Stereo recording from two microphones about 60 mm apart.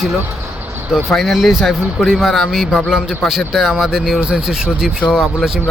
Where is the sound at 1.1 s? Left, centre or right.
Centre.